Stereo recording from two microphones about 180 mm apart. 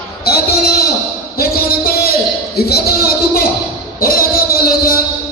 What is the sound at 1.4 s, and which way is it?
Music, 55° left (ahead or behind).